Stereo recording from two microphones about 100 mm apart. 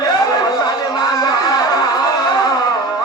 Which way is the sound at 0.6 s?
40° left (ahead or behind).